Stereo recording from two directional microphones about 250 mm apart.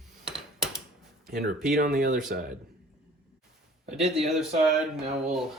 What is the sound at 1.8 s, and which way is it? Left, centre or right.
Speech, right.